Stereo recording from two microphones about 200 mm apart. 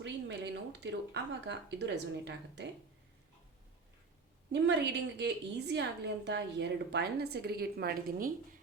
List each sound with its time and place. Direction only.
0.0 s speech: 60° right (ahead or behind)
4.5 s a woman's voice: 60° right (ahead or behind)